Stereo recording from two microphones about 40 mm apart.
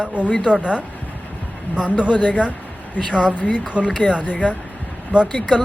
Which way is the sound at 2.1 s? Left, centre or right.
Left.